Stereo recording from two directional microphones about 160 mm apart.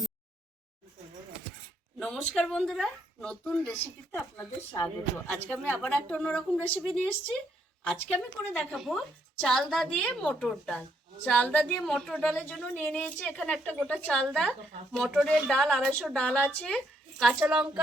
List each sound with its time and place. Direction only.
2.0 s a woman's voice: 5° left (ahead or behind)
4.1 s a woman's voice: 20° left (ahead or behind); by 17.7 s 5° right (ahead or behind)